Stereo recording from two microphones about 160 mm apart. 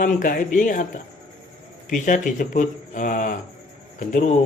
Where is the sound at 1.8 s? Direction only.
55° left (ahead or behind).